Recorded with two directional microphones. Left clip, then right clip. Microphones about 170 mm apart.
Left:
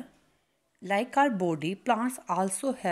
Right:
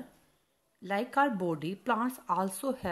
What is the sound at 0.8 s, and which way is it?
A woman's voice, 15° left (ahead or behind).